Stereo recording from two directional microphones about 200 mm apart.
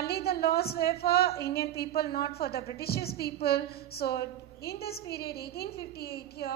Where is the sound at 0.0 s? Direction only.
50° left (ahead or behind).